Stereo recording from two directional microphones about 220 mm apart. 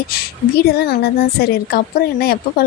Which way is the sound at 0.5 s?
45° left (ahead or behind).